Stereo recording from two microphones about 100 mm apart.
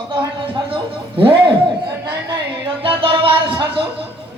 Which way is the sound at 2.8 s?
65° right (ahead or behind).